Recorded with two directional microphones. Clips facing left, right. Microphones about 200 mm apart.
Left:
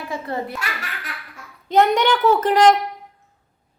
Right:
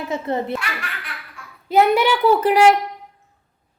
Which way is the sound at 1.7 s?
5° right (ahead or behind).